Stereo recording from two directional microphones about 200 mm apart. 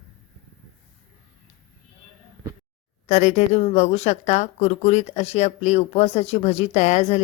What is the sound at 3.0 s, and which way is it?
Speech, 35° left (ahead or behind).